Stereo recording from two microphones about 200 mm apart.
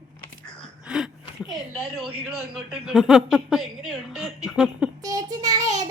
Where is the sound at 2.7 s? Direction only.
5° right (ahead or behind).